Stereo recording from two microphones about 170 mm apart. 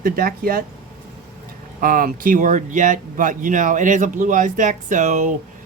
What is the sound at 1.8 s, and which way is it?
Speech, 55° right (ahead or behind).